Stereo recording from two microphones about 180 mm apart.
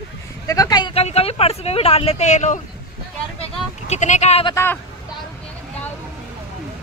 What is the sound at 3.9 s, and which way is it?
Speech, 40° left (ahead or behind).